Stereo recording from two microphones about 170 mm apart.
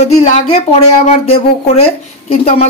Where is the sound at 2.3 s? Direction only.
35° left (ahead or behind).